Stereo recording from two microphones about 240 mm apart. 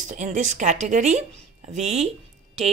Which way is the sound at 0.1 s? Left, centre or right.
Right.